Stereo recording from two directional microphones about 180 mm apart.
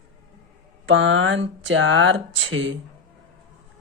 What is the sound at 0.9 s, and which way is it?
Speech, 90° right.